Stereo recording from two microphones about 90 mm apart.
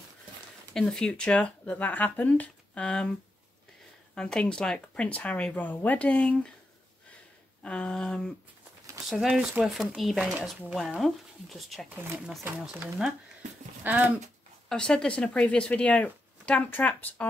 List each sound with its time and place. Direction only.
0.7 s speech: 10° left (ahead or behind)
4.1 s speech: 10° left (ahead or behind)
7.6 s speech: 10° left (ahead or behind)
9.2 s speech: 5° right (ahead or behind)
11.0 s speech: centre (ahead or behind)
11.9 s speech: 25° right (ahead or behind)
13.8 s speech: 20° right (ahead or behind)
14.7 s speech: 10° left (ahead or behind)